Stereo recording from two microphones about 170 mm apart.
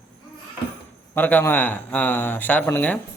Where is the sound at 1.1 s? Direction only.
10° left (ahead or behind).